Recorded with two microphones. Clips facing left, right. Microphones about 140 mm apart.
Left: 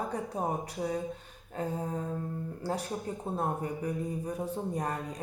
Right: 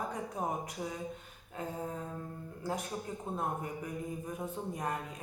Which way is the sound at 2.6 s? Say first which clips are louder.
Left 2 dB; 35° left (ahead or behind).